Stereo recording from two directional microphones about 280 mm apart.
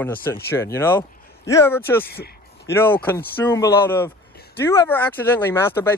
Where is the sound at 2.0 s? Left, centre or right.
Left.